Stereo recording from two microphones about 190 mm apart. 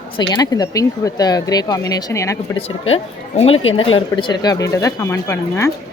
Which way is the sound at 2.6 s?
30° left (ahead or behind).